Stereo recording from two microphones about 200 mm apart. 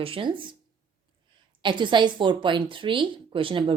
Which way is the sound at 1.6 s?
25° right (ahead or behind).